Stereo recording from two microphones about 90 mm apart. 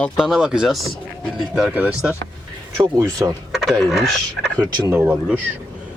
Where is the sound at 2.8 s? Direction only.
40° right (ahead or behind).